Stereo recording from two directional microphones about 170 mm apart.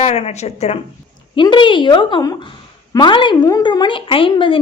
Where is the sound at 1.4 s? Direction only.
30° left (ahead or behind).